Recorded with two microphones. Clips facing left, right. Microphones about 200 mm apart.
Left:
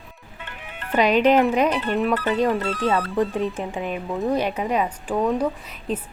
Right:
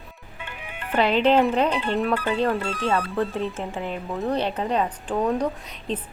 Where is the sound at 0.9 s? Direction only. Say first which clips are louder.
Left 2 dB; 15° left (ahead or behind).